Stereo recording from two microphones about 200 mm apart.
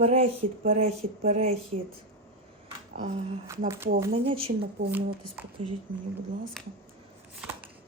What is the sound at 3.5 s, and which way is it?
Speech, 15° right (ahead or behind).